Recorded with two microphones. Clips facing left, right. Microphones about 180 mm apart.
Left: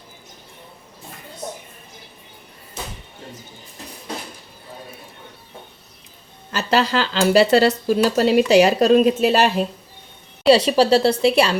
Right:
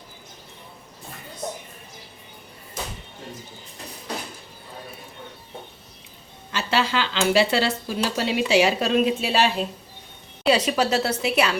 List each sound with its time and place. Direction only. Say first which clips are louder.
6.5 s speech: left 4 dB; 40° left (ahead or behind)
10.5 s speech: left 7 dB; 30° left (ahead or behind)